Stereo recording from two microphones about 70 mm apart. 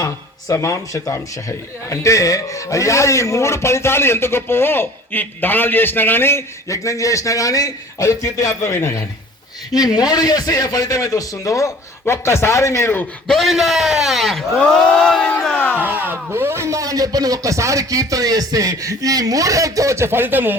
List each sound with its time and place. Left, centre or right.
0.0 s speech: left
6.7 s a man's voice: left
9.7 s a man's voice: left
13.2 s a man's voice: centre
15.8 s speech: right
20.1 s speech: right